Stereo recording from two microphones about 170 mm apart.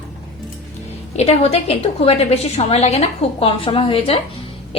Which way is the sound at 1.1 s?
35° left (ahead or behind).